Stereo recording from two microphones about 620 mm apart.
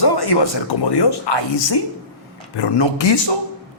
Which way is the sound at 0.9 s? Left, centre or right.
Left.